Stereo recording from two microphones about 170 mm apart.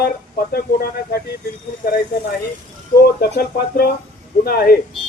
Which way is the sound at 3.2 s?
65° left (ahead or behind).